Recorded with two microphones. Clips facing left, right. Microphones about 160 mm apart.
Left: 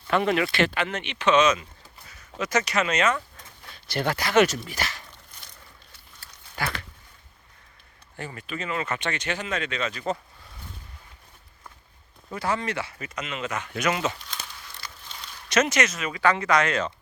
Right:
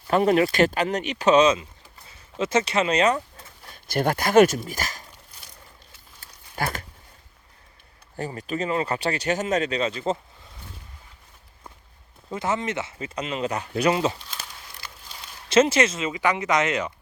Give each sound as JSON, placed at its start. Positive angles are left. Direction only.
{"t": 0.1, "sound": "speech", "side_deg": -40}
{"t": 6.6, "sound": "a sound", "side_deg": -45}
{"t": 8.1, "sound": "speech", "side_deg": -40}
{"t": 12.3, "sound": "speech", "side_deg": -20}
{"t": 15.4, "sound": "speech", "side_deg": -30}